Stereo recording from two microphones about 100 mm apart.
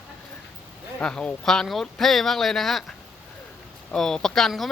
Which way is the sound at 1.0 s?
5° left (ahead or behind).